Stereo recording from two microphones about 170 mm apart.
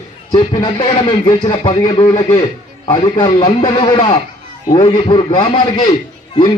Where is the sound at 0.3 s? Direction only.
25° left (ahead or behind).